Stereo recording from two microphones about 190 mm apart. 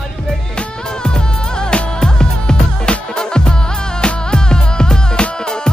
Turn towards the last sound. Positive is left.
turn(degrees=5)  # may be behind; listen again after turning